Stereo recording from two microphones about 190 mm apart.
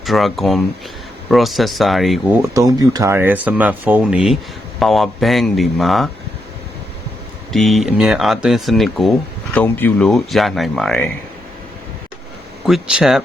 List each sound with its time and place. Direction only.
0.0 s speech: centre (ahead or behind)
2.4 s speech: 15° right (ahead or behind); by 6.1 s centre (ahead or behind)
7.5 s speech: centre (ahead or behind)
12.6 s speech: 5° right (ahead or behind)